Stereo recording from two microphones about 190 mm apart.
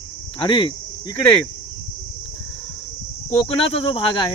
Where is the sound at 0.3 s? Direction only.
25° left (ahead or behind).